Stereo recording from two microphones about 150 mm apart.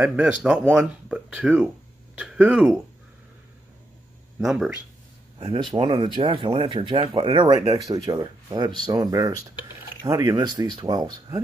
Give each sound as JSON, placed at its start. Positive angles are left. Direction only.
{"t": 0.0, "sound": "speech", "side_deg": -5}
{"t": 4.4, "sound": "speech", "side_deg": -5}
{"t": 5.8, "sound": "speech", "side_deg": -30}